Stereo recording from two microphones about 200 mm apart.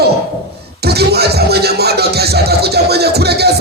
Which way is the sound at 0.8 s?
55° right (ahead or behind).